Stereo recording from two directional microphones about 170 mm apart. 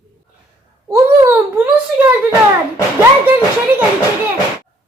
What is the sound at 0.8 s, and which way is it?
A child's voice, 15° right (ahead or behind).